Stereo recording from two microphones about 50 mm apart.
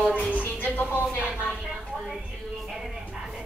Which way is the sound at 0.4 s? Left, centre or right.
Left.